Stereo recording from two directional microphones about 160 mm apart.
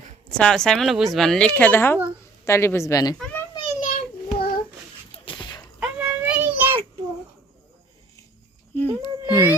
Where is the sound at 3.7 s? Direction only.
50° left (ahead or behind).